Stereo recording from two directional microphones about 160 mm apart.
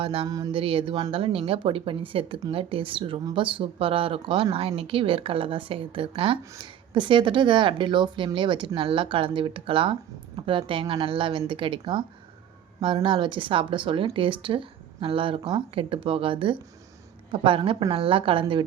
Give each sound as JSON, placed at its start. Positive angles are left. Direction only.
{"t": 0.0, "sound": "a woman's voice", "side_deg": -35}
{"t": 0.3, "sound": "music", "side_deg": -25}
{"t": 0.6, "sound": "a woman's voice", "side_deg": -35}